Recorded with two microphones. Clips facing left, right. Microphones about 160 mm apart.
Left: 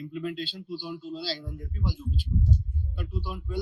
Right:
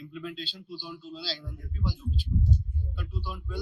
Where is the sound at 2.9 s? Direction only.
50° left (ahead or behind).